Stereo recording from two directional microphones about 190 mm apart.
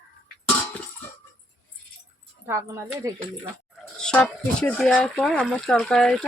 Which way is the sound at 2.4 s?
15° right (ahead or behind).